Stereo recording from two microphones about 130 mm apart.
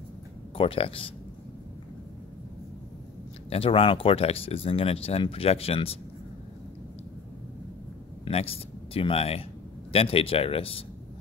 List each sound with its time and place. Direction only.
0.6 s speech: 45° left (ahead or behind)
3.4 s speech: 45° left (ahead or behind)
8.3 s speech: 50° left (ahead or behind)